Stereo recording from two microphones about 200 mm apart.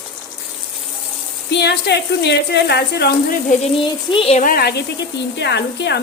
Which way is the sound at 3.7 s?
25° left (ahead or behind).